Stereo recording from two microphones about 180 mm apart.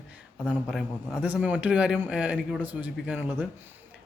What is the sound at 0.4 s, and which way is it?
A man's voice, 5° right (ahead or behind).